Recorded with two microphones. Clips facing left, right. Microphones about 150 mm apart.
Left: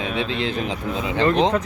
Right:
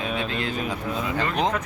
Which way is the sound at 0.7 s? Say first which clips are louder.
Left 2 dB; 25° left (ahead or behind).